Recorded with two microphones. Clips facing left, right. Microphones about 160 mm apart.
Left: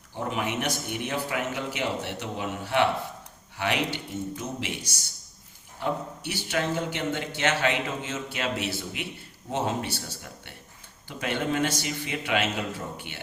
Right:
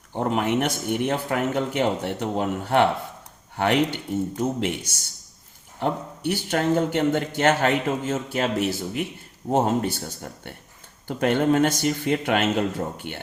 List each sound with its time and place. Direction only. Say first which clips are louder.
0.1 s speech: right 7 dB; 55° right (ahead or behind)